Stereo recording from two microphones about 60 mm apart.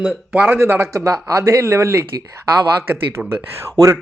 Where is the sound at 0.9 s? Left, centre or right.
Right.